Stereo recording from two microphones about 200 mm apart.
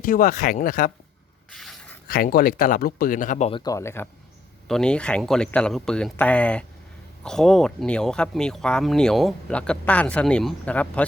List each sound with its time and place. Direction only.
0.0 s speech: 45° left (ahead or behind)
1.5 s mechanisms: 5° left (ahead or behind)
2.0 s speech: 50° left (ahead or behind)
3.6 s speech: 15° left (ahead or behind)